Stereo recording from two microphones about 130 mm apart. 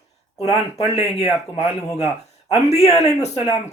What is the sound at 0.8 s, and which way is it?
Speech, 55° left (ahead or behind).